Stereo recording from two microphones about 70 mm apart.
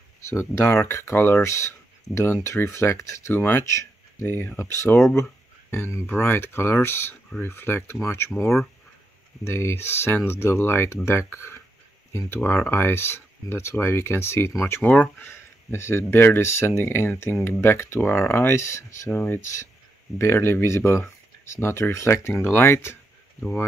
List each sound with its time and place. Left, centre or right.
0.3 s speech: left
3.3 s speech: left
9.4 s speech: left
14.8 s speech: left
19.0 s speech: left
19.3 s speech: left